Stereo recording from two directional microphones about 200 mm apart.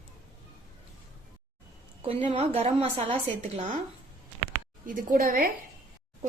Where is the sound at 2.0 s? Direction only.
30° right (ahead or behind).